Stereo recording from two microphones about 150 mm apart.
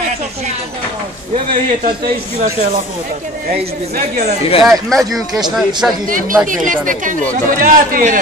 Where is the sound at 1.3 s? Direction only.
40° right (ahead or behind).